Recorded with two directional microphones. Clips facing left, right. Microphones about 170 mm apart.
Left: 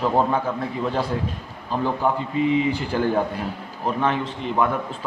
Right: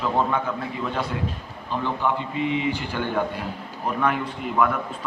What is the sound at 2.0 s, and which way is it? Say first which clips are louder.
A man's voice: left 4 dB; 35° left (ahead or behind).